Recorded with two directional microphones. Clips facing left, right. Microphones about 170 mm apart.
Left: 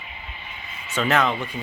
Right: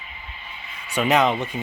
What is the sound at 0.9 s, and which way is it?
Speech, 15° right (ahead or behind).